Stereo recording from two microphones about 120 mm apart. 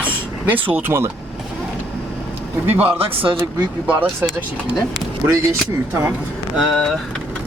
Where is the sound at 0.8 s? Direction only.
20° right (ahead or behind).